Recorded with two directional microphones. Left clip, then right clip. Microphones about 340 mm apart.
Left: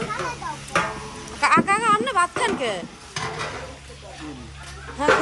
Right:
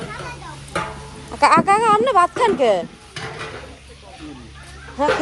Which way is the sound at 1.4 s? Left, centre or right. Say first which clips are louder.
Right 5 dB; centre.